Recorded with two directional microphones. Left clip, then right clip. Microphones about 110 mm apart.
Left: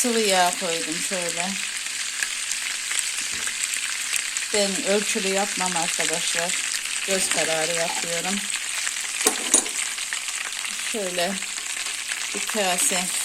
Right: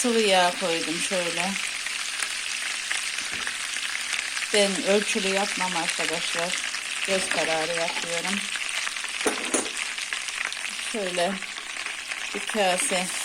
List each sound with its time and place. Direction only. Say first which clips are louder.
0.0 s speech: even; centre (ahead or behind)
4.5 s frying: right 1 dB; 5° right (ahead or behind)
5.5 s frying: left 1 dB; 15° left (ahead or behind)
7.5 s speech: left 2 dB; centre (ahead or behind)
12.5 s speech: right 1 dB; centre (ahead or behind)